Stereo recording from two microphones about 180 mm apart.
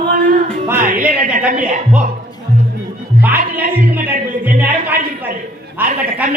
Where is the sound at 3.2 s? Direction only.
10° right (ahead or behind).